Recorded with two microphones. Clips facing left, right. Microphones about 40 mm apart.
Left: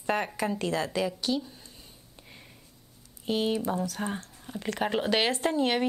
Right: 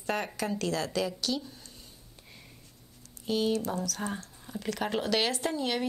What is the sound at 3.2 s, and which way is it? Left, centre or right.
Speech, left.